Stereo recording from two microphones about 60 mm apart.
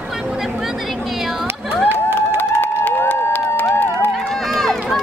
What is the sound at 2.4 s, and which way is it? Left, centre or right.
Run, left.